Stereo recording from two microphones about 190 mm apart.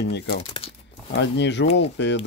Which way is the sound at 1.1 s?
70° left (ahead or behind).